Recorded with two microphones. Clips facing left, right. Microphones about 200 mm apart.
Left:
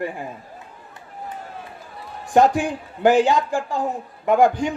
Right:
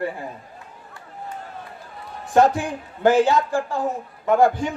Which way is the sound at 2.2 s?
15° left (ahead or behind).